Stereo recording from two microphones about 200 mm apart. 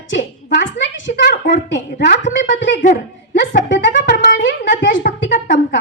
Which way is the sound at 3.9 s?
40° left (ahead or behind).